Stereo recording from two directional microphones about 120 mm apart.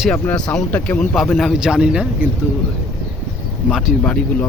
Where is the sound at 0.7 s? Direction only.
15° left (ahead or behind).